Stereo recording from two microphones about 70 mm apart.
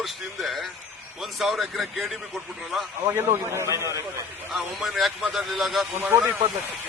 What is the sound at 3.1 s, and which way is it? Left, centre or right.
Speech, right.